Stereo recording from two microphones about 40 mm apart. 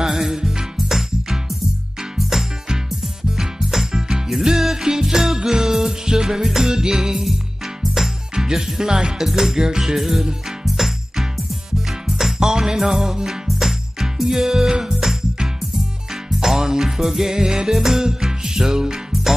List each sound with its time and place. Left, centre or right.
0.0 s music: centre